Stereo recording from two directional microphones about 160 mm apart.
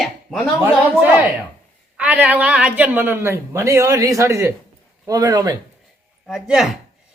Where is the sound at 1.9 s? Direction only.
10° right (ahead or behind); by 5.5 s 25° right (ahead or behind).